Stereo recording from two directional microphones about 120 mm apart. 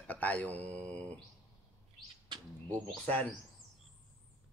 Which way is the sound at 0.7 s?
10° left (ahead or behind).